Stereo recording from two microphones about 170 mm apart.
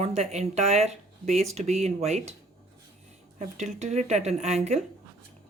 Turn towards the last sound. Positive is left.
turn(degrees=-40)  # may be behind; listen again after turning